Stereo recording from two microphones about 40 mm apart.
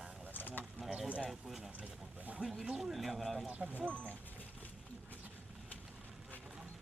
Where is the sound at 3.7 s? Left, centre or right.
Right.